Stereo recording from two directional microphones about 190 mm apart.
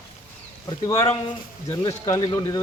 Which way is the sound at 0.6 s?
20° left (ahead or behind).